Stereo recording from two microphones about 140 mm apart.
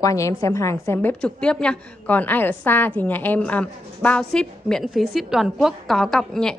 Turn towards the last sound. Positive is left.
turn(degrees=5)  # may be behind; listen again after turning